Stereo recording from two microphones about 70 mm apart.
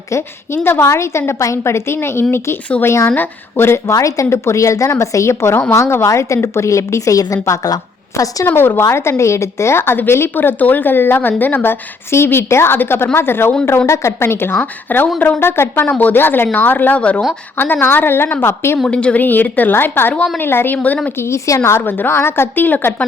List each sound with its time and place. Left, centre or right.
0.1 s a woman's voice: left
3.9 s a woman's voice: left
8.4 s a woman's voice: left
13.8 s a woman's voice: left; by 17.2 s centre
17.6 s a woman's voice: left
18.9 s a woman's voice: centre
19.2 s a woman's voice: left
20.7 s a woman's voice: left
21.2 s a woman's voice: left